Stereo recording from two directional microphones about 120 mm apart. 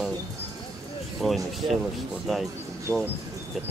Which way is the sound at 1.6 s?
50° right (ahead or behind).